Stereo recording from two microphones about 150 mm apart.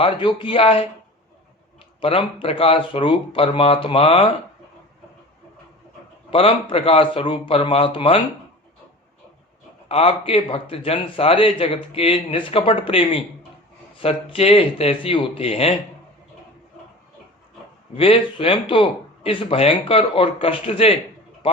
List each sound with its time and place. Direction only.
0.0 s a man's voice: 30° left (ahead or behind)
2.0 s a man's voice: 35° left (ahead or behind)
6.3 s a man's voice: 40° left (ahead or behind)
9.9 s a man's voice: 40° left (ahead or behind)
17.9 s a man's voice: 40° left (ahead or behind)